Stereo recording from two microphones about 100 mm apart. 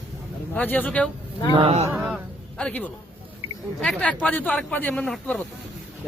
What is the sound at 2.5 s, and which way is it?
Speech, 15° left (ahead or behind).